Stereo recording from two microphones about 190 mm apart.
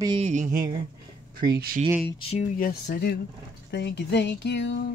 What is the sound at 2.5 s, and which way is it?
Speech, 50° left (ahead or behind).